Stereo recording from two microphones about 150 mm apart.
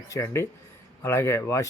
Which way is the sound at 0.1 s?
20° left (ahead or behind).